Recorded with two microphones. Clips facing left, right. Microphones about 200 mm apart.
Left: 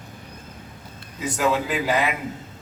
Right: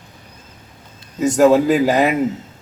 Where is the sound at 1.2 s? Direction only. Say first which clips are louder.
Right 11 dB; 45° right (ahead or behind).